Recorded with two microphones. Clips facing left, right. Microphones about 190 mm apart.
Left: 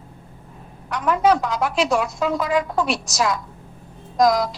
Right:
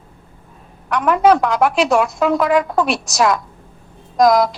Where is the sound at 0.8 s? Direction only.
65° right (ahead or behind).